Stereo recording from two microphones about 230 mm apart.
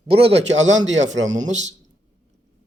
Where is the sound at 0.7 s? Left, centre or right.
Right.